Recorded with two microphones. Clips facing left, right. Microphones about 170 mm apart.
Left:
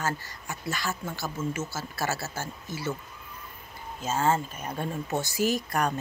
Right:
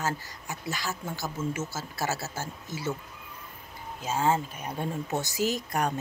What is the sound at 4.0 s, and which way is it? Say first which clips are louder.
Speech: left 1 dB; 15° right (ahead or behind).